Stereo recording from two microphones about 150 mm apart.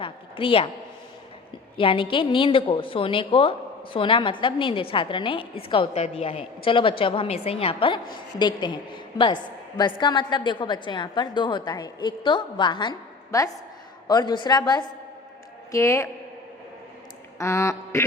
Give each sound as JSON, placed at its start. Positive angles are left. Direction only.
{"t": 0.0, "sound": "a woman's voice", "side_deg": 35}
{"t": 1.7, "sound": "a woman's voice", "side_deg": 35}
{"t": 17.3, "sound": "a woman's voice", "side_deg": 20}